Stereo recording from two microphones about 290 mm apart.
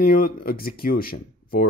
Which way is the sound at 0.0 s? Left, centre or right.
Left.